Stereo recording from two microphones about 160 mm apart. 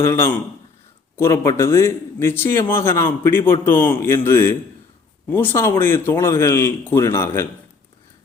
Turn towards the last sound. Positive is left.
turn(degrees=15)  # may be behind; listen again after turning